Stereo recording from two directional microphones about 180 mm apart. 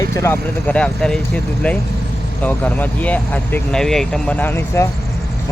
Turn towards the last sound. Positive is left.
turn(degrees=10)  # may be behind; listen again after turning